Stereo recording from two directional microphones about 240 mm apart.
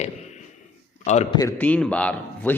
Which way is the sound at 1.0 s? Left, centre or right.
Left.